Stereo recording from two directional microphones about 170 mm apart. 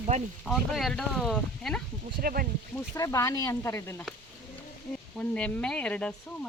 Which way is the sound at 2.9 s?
20° left (ahead or behind).